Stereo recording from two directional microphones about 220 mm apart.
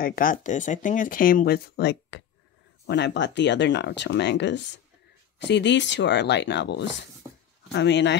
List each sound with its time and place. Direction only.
0.0 s speech: 40° left (ahead or behind)